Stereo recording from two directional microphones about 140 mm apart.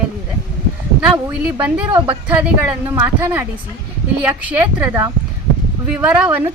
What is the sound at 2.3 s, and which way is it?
Speech, 15° right (ahead or behind).